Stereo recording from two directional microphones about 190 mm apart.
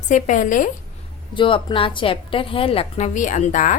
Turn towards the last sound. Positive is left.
turn(degrees=40)  # may be behind; listen again after turning